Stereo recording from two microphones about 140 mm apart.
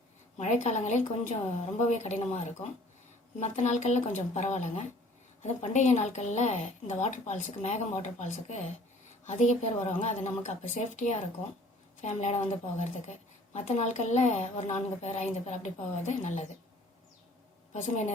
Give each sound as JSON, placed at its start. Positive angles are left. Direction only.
{"t": 0.3, "sound": "a woman's voice", "side_deg": 55}
{"t": 17.7, "sound": "a woman's voice", "side_deg": 60}